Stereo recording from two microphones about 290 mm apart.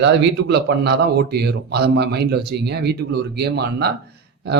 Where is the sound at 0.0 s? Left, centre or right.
Right.